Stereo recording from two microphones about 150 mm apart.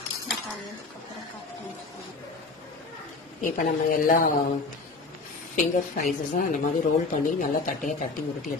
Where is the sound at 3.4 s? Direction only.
65° left (ahead or behind).